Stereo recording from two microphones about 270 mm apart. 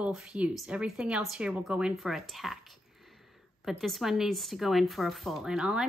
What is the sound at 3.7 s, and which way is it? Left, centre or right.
Speech, centre.